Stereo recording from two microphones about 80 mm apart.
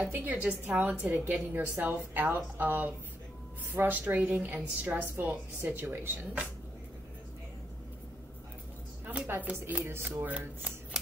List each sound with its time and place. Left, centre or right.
0.1 s a woman's voice: centre
1.1 s a woman's voice: right
9.0 s a sound: centre
9.3 s a woman's voice: right
9.8 s speech: right
10.2 s speech: centre